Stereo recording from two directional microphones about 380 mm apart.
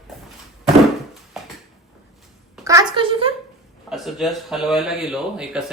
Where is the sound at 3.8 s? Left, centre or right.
Centre.